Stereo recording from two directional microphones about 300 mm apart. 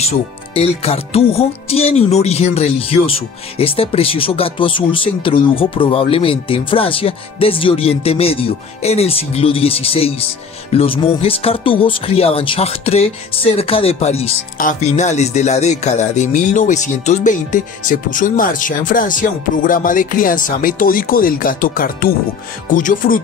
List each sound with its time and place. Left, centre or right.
0.6 s speech: centre